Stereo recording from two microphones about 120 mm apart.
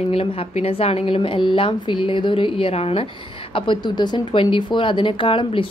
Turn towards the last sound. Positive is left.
turn(degrees=45)  # may be behind; listen again after turning